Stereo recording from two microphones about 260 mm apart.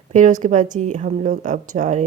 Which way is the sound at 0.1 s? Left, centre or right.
Right.